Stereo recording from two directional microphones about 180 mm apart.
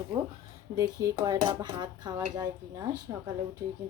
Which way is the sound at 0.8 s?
20° right (ahead or behind).